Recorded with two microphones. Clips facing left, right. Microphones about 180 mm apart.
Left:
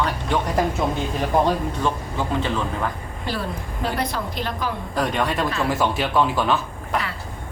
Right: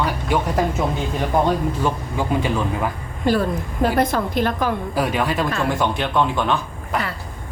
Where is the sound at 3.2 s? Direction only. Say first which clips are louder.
Right 9 dB; 45° right (ahead or behind).